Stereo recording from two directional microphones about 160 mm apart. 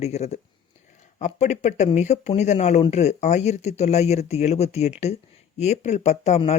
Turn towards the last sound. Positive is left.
turn(degrees=45)  # may be behind; listen again after turning